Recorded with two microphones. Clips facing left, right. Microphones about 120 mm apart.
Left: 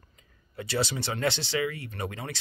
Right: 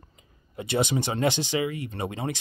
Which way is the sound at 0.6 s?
20° right (ahead or behind).